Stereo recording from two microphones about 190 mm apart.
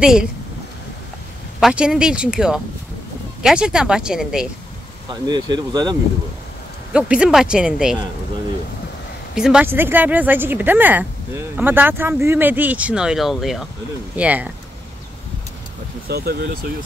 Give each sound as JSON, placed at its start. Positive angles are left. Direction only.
{"t": 0.0, "sound": "speech", "side_deg": -5}
{"t": 1.6, "sound": "speech", "side_deg": -5}
{"t": 5.1, "sound": "speech", "side_deg": -20}
{"t": 6.9, "sound": "speech", "side_deg": -5}
{"t": 9.3, "sound": "speech", "side_deg": -5}
{"t": 16.1, "sound": "speech", "side_deg": -55}